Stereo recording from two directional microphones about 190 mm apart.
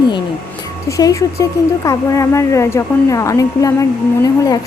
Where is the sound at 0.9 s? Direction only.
15° left (ahead or behind).